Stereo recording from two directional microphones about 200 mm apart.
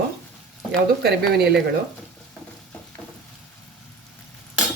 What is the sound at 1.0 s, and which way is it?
Speech, 50° right (ahead or behind).